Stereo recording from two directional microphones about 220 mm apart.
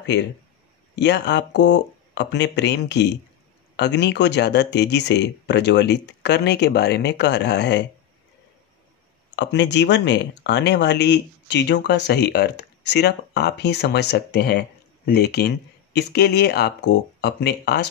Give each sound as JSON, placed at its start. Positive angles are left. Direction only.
{"t": 0.9, "sound": "speech", "side_deg": 50}
{"t": 9.3, "sound": "speech", "side_deg": 50}